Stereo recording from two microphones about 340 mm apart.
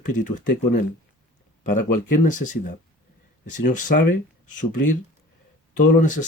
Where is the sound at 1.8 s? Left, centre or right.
Left.